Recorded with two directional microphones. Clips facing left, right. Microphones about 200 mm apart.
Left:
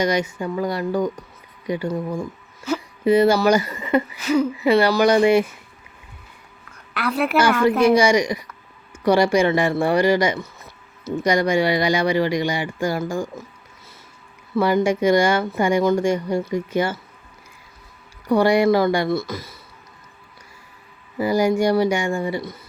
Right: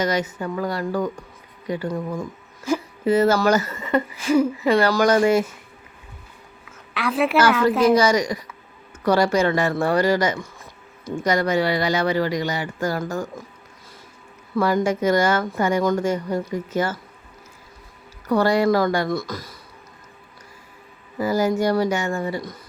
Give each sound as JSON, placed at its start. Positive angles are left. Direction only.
{"t": 0.0, "sound": "speech", "side_deg": 10}
{"t": 6.7, "sound": "a sound", "side_deg": 0}
{"t": 7.8, "sound": "speech", "side_deg": 10}
{"t": 14.5, "sound": "speech", "side_deg": 10}
{"t": 18.3, "sound": "speech", "side_deg": 15}
{"t": 21.2, "sound": "speech", "side_deg": 15}